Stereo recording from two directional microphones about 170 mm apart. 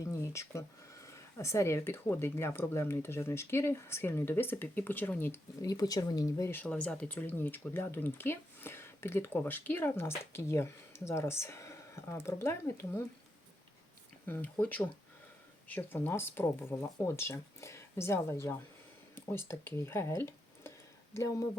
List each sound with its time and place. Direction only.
0.0 s a sound: 15° left (ahead or behind)
1.0 s speech: 15° left (ahead or behind)
14.3 s speech: 10° left (ahead or behind)